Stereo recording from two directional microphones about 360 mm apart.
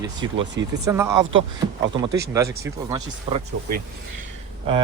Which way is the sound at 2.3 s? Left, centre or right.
Centre.